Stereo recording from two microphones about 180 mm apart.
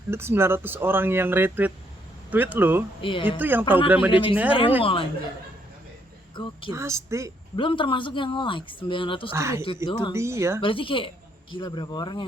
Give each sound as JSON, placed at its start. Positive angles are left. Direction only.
{"t": 0.1, "sound": "speech", "side_deg": -15}
{"t": 3.0, "sound": "speech", "side_deg": 30}
{"t": 3.2, "sound": "speech", "side_deg": -10}
{"t": 4.1, "sound": "speech", "side_deg": 30}
{"t": 6.3, "sound": "a woman's voice", "side_deg": 25}
{"t": 6.7, "sound": "speech", "side_deg": -15}
{"t": 7.5, "sound": "speech", "side_deg": 30}
{"t": 9.3, "sound": "speech", "side_deg": -15}
{"t": 9.8, "sound": "speech", "side_deg": 25}
{"t": 10.2, "sound": "speech", "side_deg": -15}
{"t": 10.6, "sound": "speech", "side_deg": 30}